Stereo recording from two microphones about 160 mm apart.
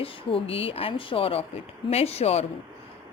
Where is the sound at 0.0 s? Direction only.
35° left (ahead or behind).